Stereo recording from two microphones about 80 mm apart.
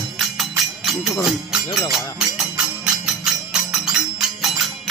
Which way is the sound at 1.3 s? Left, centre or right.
Centre.